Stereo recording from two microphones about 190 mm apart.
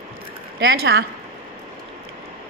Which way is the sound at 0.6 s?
55° right (ahead or behind).